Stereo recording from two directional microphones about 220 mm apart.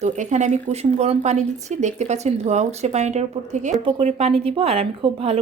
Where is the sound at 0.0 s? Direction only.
30° right (ahead or behind).